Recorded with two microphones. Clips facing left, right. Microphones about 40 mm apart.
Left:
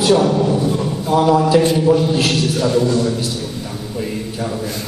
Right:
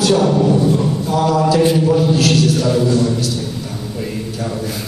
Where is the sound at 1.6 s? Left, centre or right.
Centre.